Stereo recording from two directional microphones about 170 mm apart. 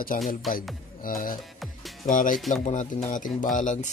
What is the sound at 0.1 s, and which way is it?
Speech, 55° left (ahead or behind).